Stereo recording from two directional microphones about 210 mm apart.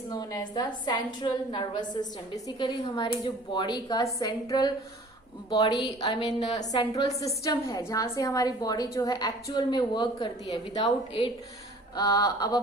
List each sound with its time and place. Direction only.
0.1 s a woman's voice: 15° left (ahead or behind)